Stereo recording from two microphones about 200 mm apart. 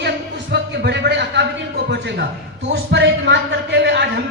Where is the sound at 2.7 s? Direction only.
60° right (ahead or behind).